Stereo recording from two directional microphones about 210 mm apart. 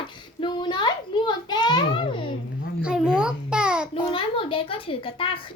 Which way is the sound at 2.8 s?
5° right (ahead or behind).